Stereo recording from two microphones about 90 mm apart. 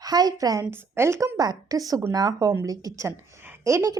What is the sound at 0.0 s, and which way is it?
Speech, 45° right (ahead or behind).